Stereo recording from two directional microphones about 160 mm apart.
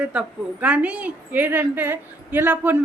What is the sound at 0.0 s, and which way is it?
A woman's voice, 10° right (ahead or behind).